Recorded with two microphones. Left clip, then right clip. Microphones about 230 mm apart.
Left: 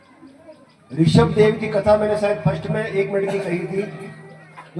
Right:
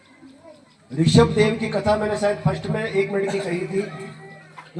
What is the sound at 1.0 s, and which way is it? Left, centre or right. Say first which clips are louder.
A man's voice: left 1 dB; right.